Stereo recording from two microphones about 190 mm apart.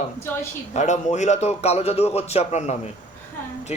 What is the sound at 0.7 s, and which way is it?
Speech, 40° left (ahead or behind).